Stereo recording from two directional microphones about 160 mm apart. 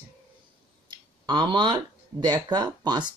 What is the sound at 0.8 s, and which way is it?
Speech, 30° right (ahead or behind).